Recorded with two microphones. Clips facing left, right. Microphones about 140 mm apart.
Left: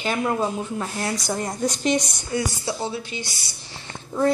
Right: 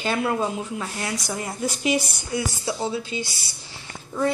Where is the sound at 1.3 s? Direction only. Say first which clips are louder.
Left 3 dB; 5° right (ahead or behind).